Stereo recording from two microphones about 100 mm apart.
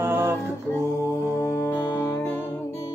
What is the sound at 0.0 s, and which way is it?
Music, 20° right (ahead or behind).